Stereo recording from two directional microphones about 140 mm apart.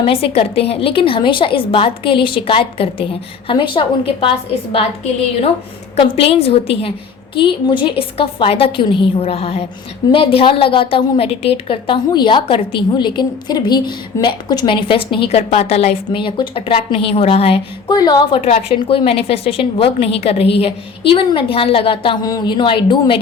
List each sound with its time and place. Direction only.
0.0 s a woman's voice: 40° left (ahead or behind)
6.0 s a woman's voice: 45° left (ahead or behind)
15.4 s a woman's voice: 50° left (ahead or behind)
16.0 s a woman's voice: 35° left (ahead or behind)
17.9 s a woman's voice: 30° left (ahead or behind)
18.4 s a woman's voice: 45° left (ahead or behind)
22.2 s a woman's voice: 25° left (ahead or behind)